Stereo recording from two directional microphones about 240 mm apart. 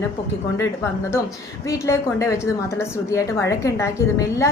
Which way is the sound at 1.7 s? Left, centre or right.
Centre.